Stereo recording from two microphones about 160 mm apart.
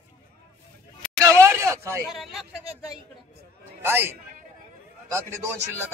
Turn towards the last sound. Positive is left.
turn(degrees=-15)  # may be behind; listen again after turning